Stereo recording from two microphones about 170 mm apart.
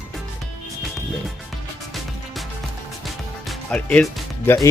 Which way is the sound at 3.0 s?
Centre (ahead or behind).